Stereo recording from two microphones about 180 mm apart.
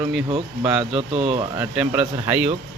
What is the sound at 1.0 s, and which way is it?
Speech, 35° right (ahead or behind).